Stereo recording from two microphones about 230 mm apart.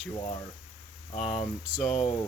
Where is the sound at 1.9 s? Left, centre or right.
Left.